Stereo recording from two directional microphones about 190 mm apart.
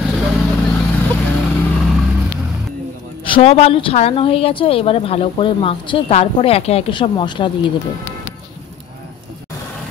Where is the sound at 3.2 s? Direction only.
30° left (ahead or behind).